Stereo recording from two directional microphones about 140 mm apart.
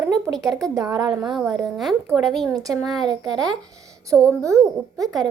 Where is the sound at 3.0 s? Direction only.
30° right (ahead or behind).